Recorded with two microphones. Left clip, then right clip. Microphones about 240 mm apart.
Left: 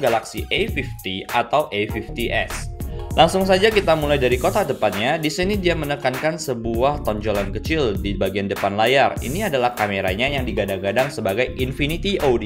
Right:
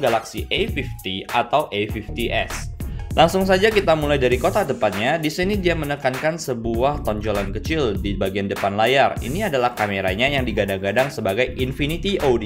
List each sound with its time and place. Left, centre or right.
0.0 s speech: centre